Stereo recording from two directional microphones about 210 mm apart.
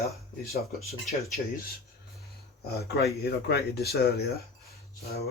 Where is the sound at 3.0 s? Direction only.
50° left (ahead or behind).